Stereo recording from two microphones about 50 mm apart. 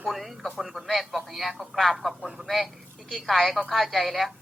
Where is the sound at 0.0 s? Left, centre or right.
Centre.